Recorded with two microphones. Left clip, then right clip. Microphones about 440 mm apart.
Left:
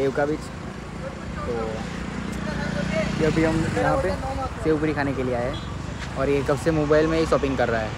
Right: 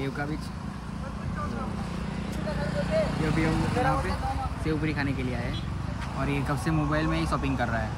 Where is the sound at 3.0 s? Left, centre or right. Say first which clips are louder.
Left 9 dB; centre.